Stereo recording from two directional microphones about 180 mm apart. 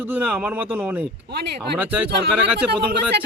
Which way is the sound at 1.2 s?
65° right (ahead or behind).